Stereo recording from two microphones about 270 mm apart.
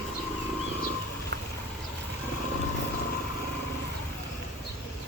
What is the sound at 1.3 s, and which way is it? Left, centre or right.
Vehicle, right.